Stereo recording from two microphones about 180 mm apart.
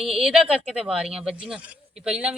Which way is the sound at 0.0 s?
Centre (ahead or behind).